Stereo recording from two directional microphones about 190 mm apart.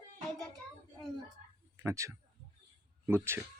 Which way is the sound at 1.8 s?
15° right (ahead or behind).